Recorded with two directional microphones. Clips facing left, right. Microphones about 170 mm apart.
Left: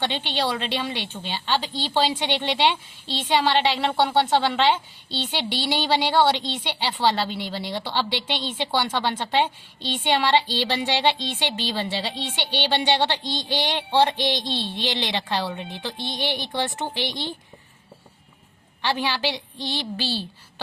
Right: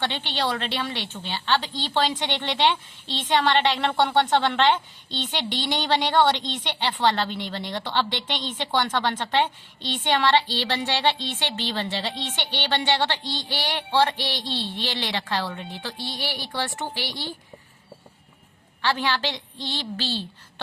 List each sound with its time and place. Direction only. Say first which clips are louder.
0.0 s a woman's voice: left 1 dB; 15° left (ahead or behind)
18.8 s a woman's voice: even; 15° left (ahead or behind)